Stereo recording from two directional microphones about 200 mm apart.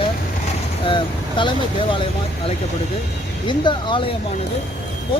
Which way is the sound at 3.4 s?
25° left (ahead or behind).